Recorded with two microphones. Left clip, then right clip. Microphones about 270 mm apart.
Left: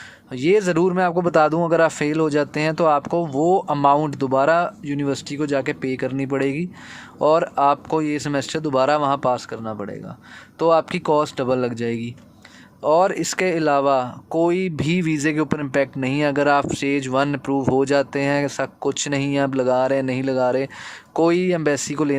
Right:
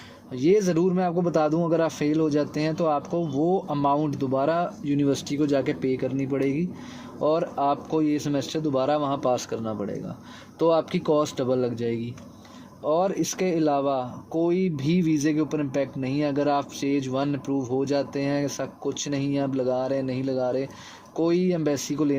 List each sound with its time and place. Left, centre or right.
0.3 s speech: left
3.3 s speech: left
3.7 s speech: left